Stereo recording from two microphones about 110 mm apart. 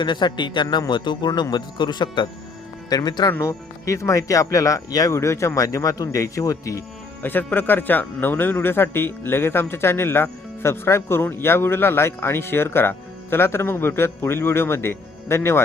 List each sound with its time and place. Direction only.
0.0 s a man's voice: 45° left (ahead or behind)
3.3 s speech: 25° left (ahead or behind)
7.2 s speech: 20° left (ahead or behind)